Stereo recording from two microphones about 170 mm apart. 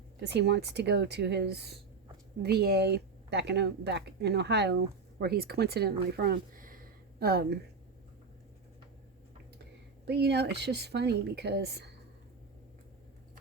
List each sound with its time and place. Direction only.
0.2 s speech: 85° right
5.2 s speech: 70° right (ahead or behind)
10.1 s speech: 75° right (ahead or behind)